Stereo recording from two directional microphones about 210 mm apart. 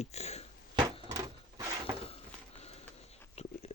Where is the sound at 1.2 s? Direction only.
15° right (ahead or behind).